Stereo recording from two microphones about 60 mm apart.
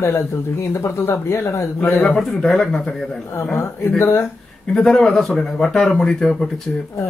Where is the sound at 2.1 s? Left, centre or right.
Centre.